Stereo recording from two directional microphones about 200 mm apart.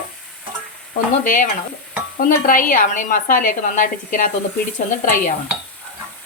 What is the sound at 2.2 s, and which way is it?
A woman's voice, 45° left (ahead or behind).